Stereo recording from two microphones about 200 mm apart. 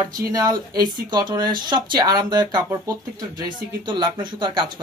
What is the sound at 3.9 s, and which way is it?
Speech, 25° right (ahead or behind).